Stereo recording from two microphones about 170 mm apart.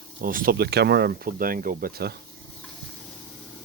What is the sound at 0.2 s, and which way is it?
Speech, 55° right (ahead or behind).